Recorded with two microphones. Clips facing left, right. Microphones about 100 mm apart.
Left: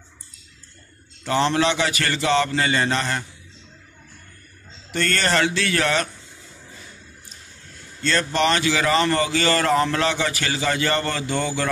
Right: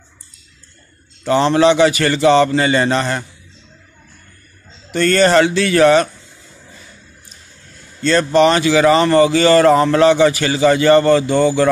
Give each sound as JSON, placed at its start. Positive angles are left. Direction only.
{"t": 1.5, "sound": "a man's voice", "side_deg": -20}
{"t": 2.8, "sound": "a man's voice", "side_deg": -50}
{"t": 4.9, "sound": "a man's voice", "side_deg": -20}
{"t": 8.2, "sound": "a man's voice", "side_deg": -20}